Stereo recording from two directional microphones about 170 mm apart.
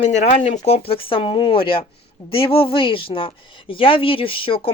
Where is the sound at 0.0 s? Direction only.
45° left (ahead or behind).